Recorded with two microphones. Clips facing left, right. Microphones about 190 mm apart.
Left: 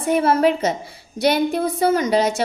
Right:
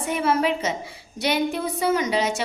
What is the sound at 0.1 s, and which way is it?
A woman's voice, 40° left (ahead or behind).